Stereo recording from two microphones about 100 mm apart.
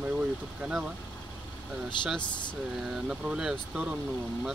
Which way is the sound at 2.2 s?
50° left (ahead or behind).